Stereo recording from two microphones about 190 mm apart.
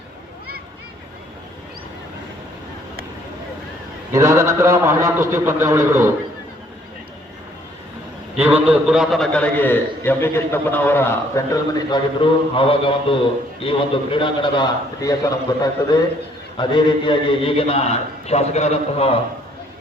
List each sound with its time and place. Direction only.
4.1 s a man's voice: 15° right (ahead or behind)
8.4 s a man's voice: 10° right (ahead or behind); by 19.2 s 30° left (ahead or behind)